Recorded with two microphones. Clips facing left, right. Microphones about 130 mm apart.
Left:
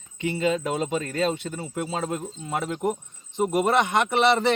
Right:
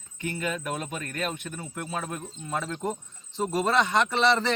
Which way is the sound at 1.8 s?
25° left (ahead or behind).